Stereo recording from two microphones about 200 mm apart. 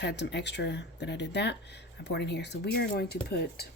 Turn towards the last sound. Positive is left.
turn(degrees=50)  # may be behind; listen again after turning